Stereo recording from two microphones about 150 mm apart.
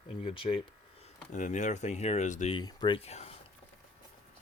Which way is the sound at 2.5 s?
30° left (ahead or behind).